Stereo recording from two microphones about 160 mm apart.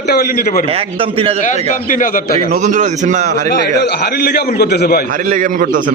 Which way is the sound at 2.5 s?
50° right (ahead or behind).